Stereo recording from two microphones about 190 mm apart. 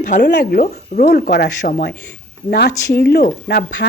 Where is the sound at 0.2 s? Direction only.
60° left (ahead or behind).